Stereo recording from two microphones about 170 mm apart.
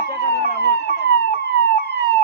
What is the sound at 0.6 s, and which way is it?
Emergency vehicle, 75° left (ahead or behind).